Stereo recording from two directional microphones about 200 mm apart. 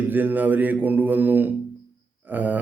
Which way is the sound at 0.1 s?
10° right (ahead or behind).